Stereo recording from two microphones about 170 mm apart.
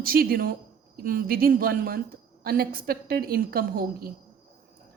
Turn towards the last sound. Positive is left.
turn(degrees=-60)  # may be behind; listen again after turning